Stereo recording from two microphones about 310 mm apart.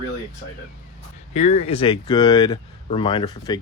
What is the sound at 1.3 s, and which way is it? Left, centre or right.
Speech, left.